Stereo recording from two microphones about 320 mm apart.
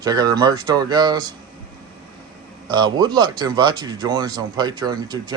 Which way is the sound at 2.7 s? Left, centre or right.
Centre.